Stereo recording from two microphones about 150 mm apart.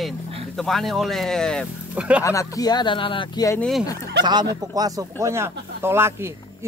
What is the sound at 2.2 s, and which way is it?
Speech, 20° left (ahead or behind).